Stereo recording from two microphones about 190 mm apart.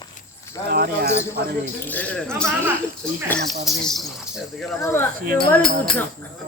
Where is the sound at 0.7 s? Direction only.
55° right (ahead or behind).